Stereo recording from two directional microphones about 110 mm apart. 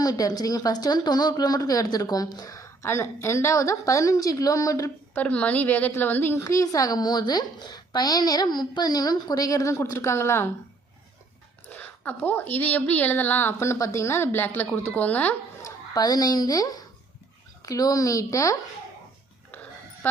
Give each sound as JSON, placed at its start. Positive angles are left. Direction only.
{"t": 0.0, "sound": "a woman's voice", "side_deg": 35}
{"t": 5.1, "sound": "a woman's voice", "side_deg": 10}
{"t": 11.7, "sound": "a woman's voice", "side_deg": 15}
{"t": 15.6, "sound": "a woman's voice", "side_deg": 35}